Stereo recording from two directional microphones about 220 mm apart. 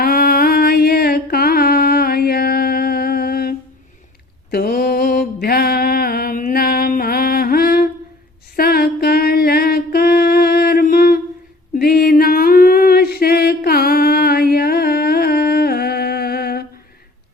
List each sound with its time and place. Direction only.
0.0 s mantra: 45° left (ahead or behind)
4.5 s mantra: 45° left (ahead or behind)
8.5 s a sound: 45° left (ahead or behind)